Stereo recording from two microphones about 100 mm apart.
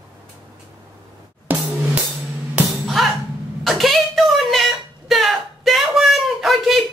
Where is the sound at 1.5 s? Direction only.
20° right (ahead or behind).